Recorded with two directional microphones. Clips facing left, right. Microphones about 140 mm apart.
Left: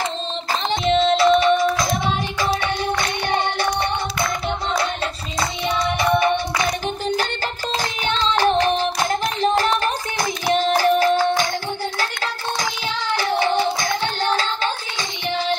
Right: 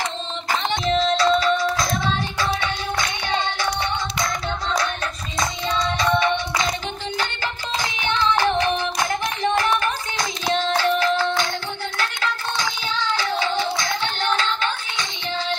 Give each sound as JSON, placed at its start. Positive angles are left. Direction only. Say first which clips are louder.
{"t": 0.8, "sound": "music", "louder": "left 4 dB", "side_deg": 25}
{"t": 8.0, "sound": "music", "louder": "left 1 dB", "side_deg": 30}
{"t": 10.4, "sound": "a sound", "louder": "left 3 dB", "side_deg": 15}
{"t": 10.8, "sound": "music", "louder": "left 4 dB", "side_deg": 35}
{"t": 13.3, "sound": "music", "louder": "left 7 dB", "side_deg": 20}
{"t": 13.8, "sound": "music", "louder": "left 2 dB", "side_deg": 35}